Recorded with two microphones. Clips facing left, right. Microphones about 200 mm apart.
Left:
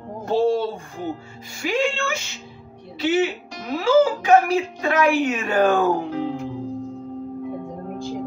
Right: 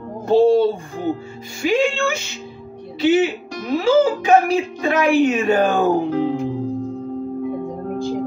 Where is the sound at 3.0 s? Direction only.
20° right (ahead or behind).